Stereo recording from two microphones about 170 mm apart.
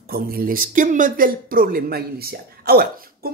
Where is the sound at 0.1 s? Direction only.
60° right (ahead or behind).